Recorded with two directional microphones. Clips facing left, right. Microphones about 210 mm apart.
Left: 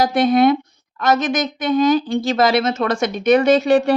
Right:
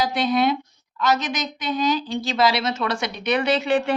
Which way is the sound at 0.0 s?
50° left (ahead or behind).